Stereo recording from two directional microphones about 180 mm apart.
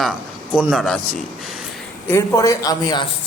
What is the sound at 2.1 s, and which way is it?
Speech, 20° left (ahead or behind).